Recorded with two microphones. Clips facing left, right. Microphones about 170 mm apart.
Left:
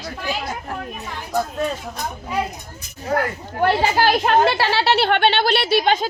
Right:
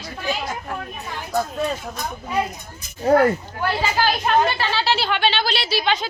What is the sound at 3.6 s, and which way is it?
Speech, 65° left (ahead or behind).